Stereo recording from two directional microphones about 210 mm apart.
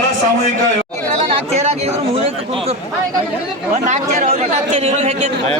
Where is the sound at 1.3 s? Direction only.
30° right (ahead or behind).